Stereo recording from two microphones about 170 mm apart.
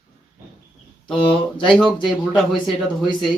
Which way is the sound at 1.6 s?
5° left (ahead or behind).